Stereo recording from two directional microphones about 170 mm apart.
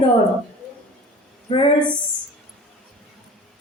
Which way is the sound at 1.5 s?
30° left (ahead or behind).